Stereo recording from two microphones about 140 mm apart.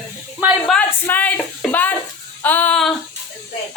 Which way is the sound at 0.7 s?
10° left (ahead or behind).